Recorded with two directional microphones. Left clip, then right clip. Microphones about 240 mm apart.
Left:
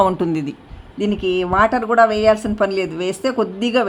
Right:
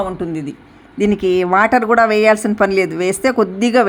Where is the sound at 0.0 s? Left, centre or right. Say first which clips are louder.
Left 5 dB; centre.